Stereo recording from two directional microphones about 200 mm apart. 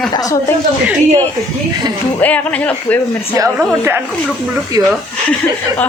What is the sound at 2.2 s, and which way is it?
Speech, 10° left (ahead or behind).